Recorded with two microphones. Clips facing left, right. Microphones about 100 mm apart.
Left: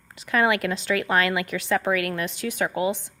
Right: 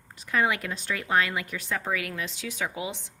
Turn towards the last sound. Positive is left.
turn(degrees=55)  # may be behind; listen again after turning